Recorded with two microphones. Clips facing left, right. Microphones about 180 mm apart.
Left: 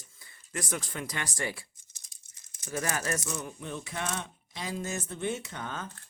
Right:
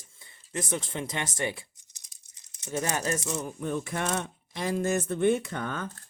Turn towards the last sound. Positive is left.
turn(degrees=-60)  # may be behind; listen again after turning